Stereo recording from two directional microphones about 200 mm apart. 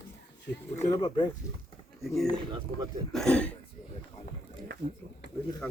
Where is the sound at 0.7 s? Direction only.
30° left (ahead or behind).